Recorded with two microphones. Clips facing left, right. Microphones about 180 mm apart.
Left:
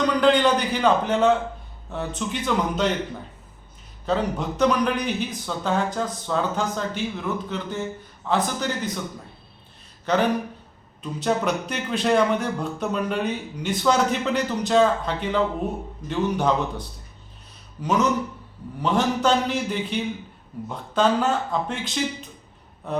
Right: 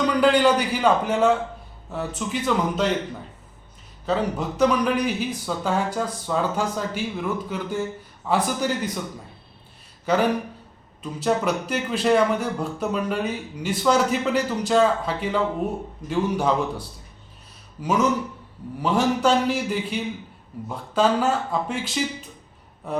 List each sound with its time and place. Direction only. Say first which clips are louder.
0.0 s a man's voice: right 1 dB; 5° right (ahead or behind)
4.0 s a man's voice: even; 5° right (ahead or behind)
10.1 s a man's voice: even; 10° right (ahead or behind)
17.8 s a man's voice: even; 10° right (ahead or behind)